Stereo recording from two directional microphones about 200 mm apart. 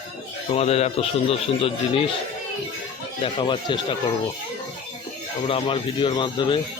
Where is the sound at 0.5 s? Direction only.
30° left (ahead or behind).